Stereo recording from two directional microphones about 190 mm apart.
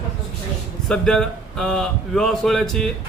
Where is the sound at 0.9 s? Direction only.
5° left (ahead or behind).